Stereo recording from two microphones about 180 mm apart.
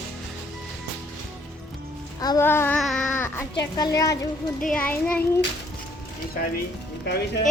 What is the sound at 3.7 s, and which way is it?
A woman's voice, 20° left (ahead or behind).